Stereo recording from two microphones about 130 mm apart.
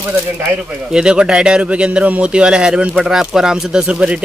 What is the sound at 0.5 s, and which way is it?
Speech, 5° right (ahead or behind).